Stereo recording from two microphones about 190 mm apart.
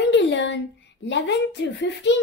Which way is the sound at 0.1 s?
70° left (ahead or behind).